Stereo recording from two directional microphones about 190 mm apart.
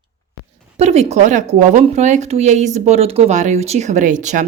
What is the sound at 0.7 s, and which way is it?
A woman's voice, 35° right (ahead or behind).